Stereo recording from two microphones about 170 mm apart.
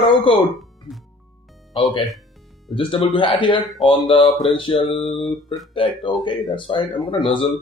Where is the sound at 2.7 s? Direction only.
30° left (ahead or behind).